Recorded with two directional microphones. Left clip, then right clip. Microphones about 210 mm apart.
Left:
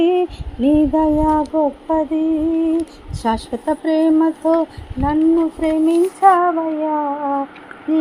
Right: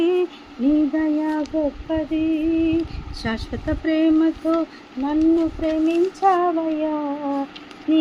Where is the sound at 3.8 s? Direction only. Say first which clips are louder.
Left 3 dB; 10° left (ahead or behind).